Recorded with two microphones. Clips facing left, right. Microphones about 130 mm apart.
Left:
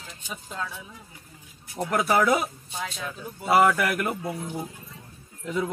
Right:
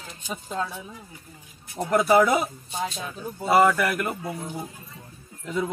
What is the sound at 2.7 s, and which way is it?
Speech, 30° right (ahead or behind).